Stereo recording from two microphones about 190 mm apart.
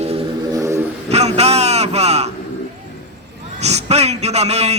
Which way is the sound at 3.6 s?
35° right (ahead or behind).